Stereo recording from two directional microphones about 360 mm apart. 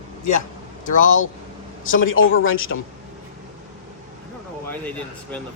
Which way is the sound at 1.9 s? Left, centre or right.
Left.